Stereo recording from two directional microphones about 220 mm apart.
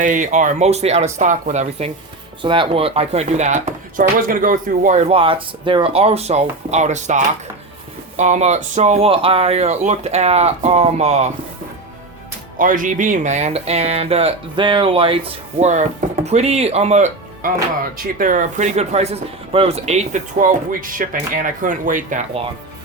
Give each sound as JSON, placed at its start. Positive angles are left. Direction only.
{"t": 0.0, "sound": "speech", "side_deg": -35}
{"t": 2.4, "sound": "speech", "side_deg": -25}
{"t": 12.5, "sound": "speech", "side_deg": -35}